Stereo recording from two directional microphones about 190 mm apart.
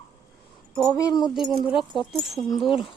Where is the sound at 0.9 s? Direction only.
20° left (ahead or behind).